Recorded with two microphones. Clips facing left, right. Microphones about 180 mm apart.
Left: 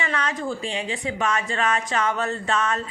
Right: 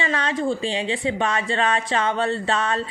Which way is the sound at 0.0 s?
30° right (ahead or behind).